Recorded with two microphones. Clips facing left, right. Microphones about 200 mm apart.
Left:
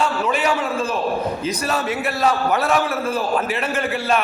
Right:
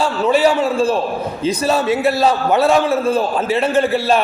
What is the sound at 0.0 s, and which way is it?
A man's voice, 30° right (ahead or behind).